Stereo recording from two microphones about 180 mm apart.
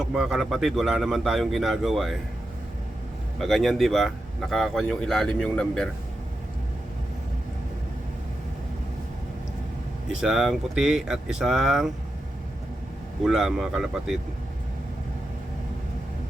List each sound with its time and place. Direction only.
0.0 s speech: 5° right (ahead or behind)
3.4 s speech: centre (ahead or behind)
10.2 s speech: 5° right (ahead or behind)
13.2 s speech: centre (ahead or behind)